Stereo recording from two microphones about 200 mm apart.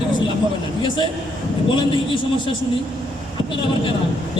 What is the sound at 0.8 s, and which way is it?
A man's voice, 25° left (ahead or behind).